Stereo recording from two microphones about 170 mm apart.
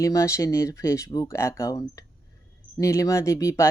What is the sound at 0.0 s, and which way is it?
Speech, 20° left (ahead or behind).